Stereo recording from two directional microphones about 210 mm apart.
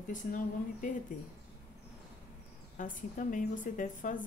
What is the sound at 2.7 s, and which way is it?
Speech, 40° left (ahead or behind).